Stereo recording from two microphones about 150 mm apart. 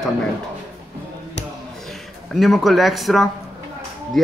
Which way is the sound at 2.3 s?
Centre (ahead or behind).